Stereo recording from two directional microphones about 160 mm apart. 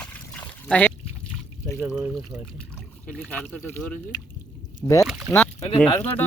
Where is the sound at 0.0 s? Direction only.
5° left (ahead or behind).